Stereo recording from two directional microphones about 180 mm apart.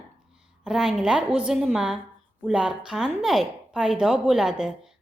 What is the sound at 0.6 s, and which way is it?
A woman's voice, 5° right (ahead or behind).